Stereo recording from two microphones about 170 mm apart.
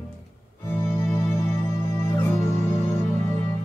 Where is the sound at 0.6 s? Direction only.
15° left (ahead or behind).